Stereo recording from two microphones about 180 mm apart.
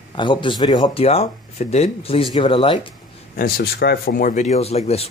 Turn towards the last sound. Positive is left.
turn(degrees=35)  # may be behind; listen again after turning